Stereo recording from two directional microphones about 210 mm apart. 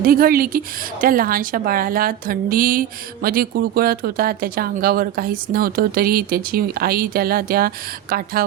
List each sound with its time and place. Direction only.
0.0 s a woman's voice: 45° right (ahead or behind)